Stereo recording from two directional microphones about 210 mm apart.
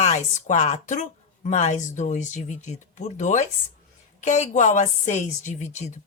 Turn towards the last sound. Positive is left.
turn(degrees=35)  # may be behind; listen again after turning